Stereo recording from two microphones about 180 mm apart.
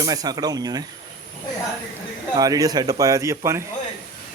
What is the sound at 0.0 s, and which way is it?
Speech, 20° right (ahead or behind).